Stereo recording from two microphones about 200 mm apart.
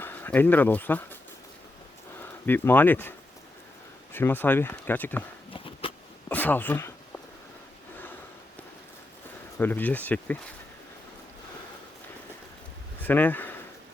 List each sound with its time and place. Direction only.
0.0 s speech: 10° left (ahead or behind)
2.5 s speech: 10° left (ahead or behind)
5.5 s a sound: 25° left (ahead or behind)
6.2 s speech: 10° left (ahead or behind)
9.6 s speech: 10° left (ahead or behind)
13.0 s a sound: 10° left (ahead or behind)